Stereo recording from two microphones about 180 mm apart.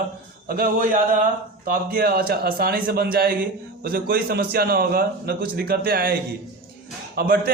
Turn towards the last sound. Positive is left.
turn(degrees=-60)  # may be behind; listen again after turning